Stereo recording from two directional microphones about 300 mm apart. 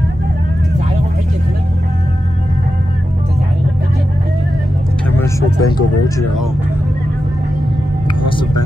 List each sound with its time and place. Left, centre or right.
5.2 s speech: centre